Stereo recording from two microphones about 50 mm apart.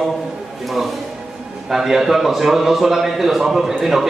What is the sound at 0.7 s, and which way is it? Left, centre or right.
A man's voice, centre.